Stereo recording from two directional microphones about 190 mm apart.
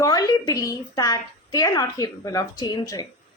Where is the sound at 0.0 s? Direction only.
20° left (ahead or behind).